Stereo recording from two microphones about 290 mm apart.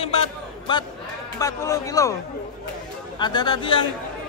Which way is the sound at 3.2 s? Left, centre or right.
Centre.